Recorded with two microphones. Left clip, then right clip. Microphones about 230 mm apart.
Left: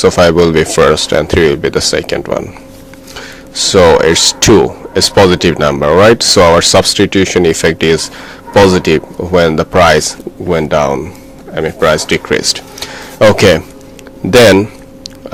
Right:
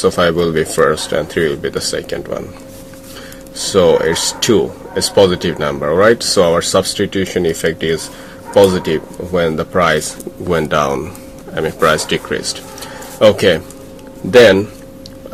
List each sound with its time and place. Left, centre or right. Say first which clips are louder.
0.0 s speech: left 6 dB; left
10.5 s speech: left 4 dB; centre
14.3 s a sound: left 2 dB; left